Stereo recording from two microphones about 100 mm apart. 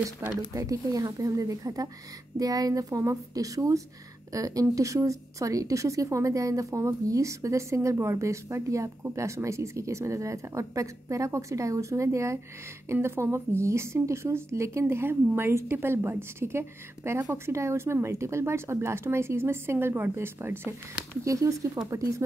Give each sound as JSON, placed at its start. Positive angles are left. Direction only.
{"t": 0.0, "sound": "a woman's voice", "side_deg": -35}